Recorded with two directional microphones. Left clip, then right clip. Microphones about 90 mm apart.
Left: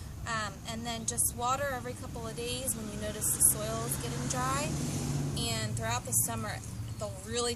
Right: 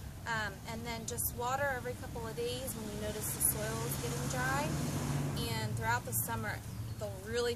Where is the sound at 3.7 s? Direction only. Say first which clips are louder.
Left 2 dB; 10° left (ahead or behind).